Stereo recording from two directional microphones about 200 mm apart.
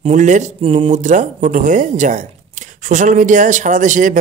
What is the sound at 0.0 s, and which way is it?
Speech, 35° right (ahead or behind).